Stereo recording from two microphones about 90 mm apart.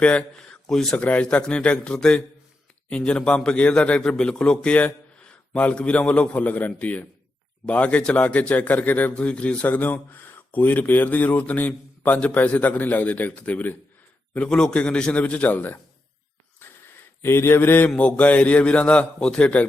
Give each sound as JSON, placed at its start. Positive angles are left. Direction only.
{"t": 0.0, "sound": "speech", "side_deg": 15}
{"t": 17.2, "sound": "speech", "side_deg": 25}